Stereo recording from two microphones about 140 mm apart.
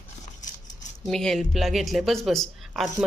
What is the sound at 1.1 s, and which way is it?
Speech, 5° left (ahead or behind).